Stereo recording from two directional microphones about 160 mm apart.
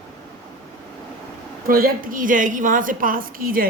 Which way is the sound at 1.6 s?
65° right (ahead or behind).